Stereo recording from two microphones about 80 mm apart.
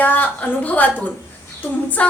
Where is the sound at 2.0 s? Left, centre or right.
Centre.